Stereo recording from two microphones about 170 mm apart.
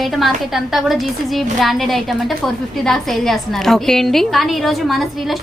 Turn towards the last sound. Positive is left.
turn(degrees=0)  # may be behind; listen again after turning